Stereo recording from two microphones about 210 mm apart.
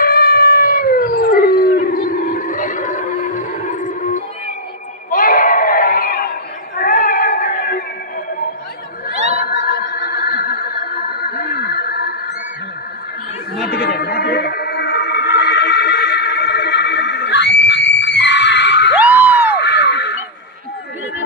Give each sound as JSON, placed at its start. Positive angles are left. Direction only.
{"t": 0.0, "sound": "howl", "side_deg": 45}
{"t": 5.1, "sound": "a sound", "side_deg": 40}
{"t": 6.8, "sound": "cat", "side_deg": 40}
{"t": 9.4, "sound": "music", "side_deg": 50}
{"t": 13.7, "sound": "music", "side_deg": 50}
{"t": 19.6, "sound": "crow", "side_deg": 55}